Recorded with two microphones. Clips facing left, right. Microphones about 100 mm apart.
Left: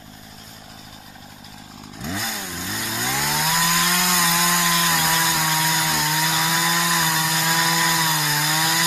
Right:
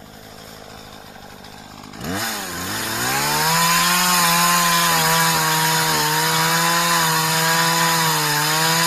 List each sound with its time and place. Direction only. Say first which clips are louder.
2.0 s chainsaw: right 3 dB; 75° right (ahead or behind)
7.6 s chainsaw: right 3 dB; 10° right (ahead or behind)
7.9 s wood: right 3 dB; 70° right (ahead or behind)